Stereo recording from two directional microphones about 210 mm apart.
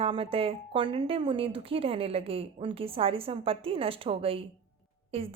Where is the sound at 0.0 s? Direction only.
25° right (ahead or behind).